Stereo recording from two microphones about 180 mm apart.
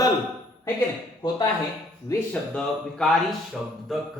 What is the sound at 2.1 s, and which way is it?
Speech, 15° left (ahead or behind).